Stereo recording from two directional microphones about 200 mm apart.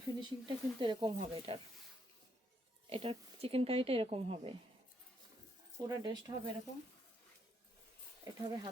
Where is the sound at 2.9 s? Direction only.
30° right (ahead or behind).